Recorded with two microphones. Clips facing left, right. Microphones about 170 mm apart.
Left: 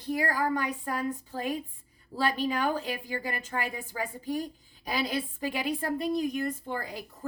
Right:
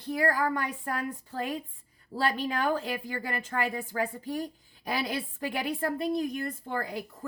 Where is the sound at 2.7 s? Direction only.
55° right (ahead or behind).